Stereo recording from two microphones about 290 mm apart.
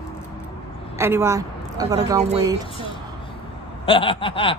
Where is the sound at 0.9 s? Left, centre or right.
Centre.